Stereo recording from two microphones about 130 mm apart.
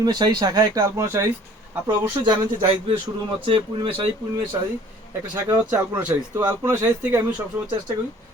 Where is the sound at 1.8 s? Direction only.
35° right (ahead or behind).